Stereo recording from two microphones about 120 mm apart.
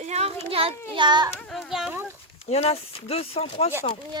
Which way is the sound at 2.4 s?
60° left (ahead or behind).